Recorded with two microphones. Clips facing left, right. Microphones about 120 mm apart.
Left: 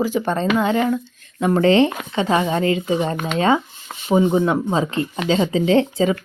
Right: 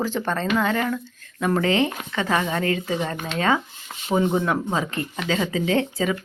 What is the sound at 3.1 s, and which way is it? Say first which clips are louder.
Speech: left 6 dB; 60° left (ahead or behind).